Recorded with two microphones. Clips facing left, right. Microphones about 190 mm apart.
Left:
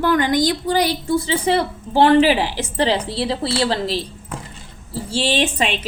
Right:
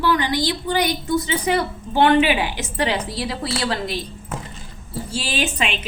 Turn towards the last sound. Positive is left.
turn(degrees=35)  # may be behind; listen again after turning